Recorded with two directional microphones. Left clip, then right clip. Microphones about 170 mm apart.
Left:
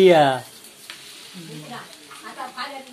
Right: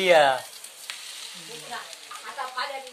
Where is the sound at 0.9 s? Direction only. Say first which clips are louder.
Right 2 dB; 60° right (ahead or behind).